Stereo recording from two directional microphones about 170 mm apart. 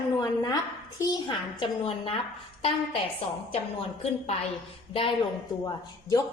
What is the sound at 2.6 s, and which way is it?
Speech, 35° left (ahead or behind).